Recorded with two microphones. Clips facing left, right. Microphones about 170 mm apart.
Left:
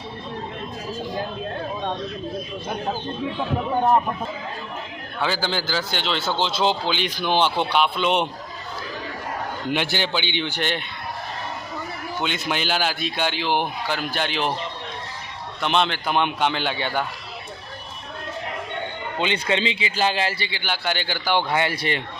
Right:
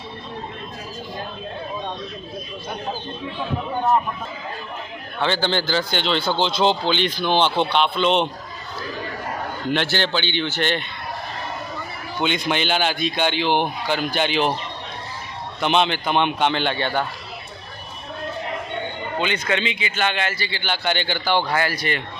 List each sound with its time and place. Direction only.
5.2 s a man's voice: 5° left (ahead or behind)
9.7 s speech: 10° left (ahead or behind)
12.2 s a man's voice: 5° left (ahead or behind)
15.6 s a man's voice: centre (ahead or behind)
19.2 s a man's voice: 25° left (ahead or behind)
20.5 s speech: 10° left (ahead or behind)
21.5 s a man's voice: 25° left (ahead or behind)